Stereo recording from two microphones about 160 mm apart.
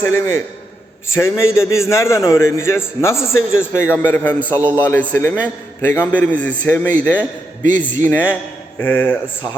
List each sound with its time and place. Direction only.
0.0 s a man's voice: 15° left (ahead or behind)